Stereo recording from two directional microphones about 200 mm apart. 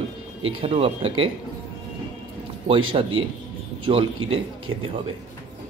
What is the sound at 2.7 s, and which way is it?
A man's voice, 25° right (ahead or behind).